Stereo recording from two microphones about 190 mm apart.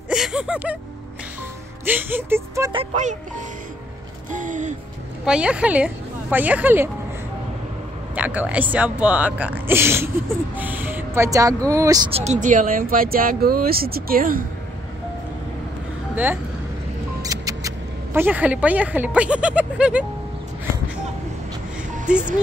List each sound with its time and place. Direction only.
0.1 s music: 5° right (ahead or behind)
1.9 s speech: 10° right (ahead or behind)
2.7 s speech: 30° right (ahead or behind)
4.3 s speech: 40° right (ahead or behind)
5.2 s speech: 5° right (ahead or behind)
8.1 s speech: 10° right (ahead or behind)
12.1 s speech: 35° right (ahead or behind)
17.2 s speech: 20° right (ahead or behind)